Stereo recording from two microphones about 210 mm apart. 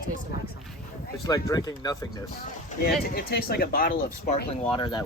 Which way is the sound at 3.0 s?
45° left (ahead or behind).